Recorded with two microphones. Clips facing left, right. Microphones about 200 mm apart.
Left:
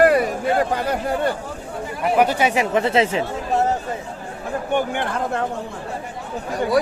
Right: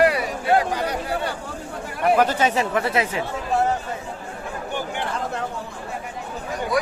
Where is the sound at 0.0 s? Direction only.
45° left (ahead or behind).